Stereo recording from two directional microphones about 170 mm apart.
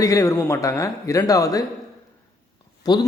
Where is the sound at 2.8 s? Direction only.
25° left (ahead or behind).